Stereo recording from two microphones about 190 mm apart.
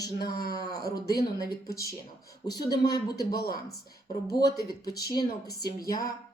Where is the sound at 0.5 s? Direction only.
20° left (ahead or behind).